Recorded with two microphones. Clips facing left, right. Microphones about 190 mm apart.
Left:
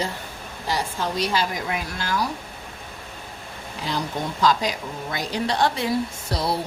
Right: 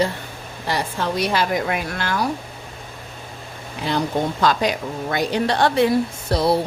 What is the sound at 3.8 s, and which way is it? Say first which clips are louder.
A woman's voice: right 6 dB; 60° right (ahead or behind).